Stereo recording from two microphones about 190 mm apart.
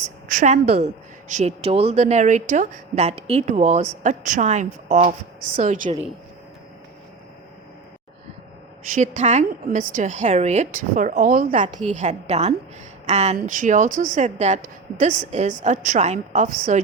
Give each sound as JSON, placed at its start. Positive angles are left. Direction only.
{"t": 0.0, "sound": "a woman's voice", "side_deg": -40}
{"t": 9.0, "sound": "a woman's voice", "side_deg": -40}